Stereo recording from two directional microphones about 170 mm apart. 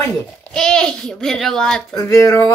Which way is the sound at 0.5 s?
5° left (ahead or behind).